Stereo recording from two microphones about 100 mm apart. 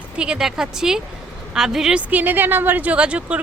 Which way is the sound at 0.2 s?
5° right (ahead or behind).